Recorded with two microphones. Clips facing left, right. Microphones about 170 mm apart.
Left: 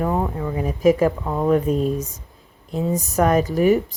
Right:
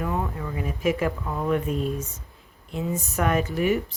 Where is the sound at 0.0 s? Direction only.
35° left (ahead or behind).